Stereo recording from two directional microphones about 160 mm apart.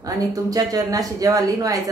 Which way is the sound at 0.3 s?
20° right (ahead or behind).